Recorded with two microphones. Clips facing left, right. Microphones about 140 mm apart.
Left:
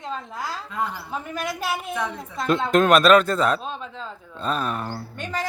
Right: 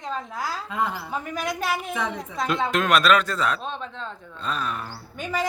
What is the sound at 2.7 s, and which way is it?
Speech, 45° left (ahead or behind).